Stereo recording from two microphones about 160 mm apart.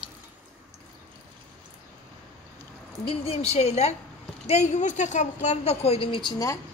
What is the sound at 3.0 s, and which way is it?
A woman's voice, 40° left (ahead or behind).